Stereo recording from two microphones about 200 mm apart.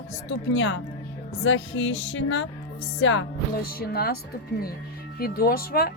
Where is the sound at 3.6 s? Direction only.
50° left (ahead or behind).